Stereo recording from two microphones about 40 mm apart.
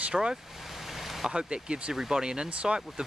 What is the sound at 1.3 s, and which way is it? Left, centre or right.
Speech, right.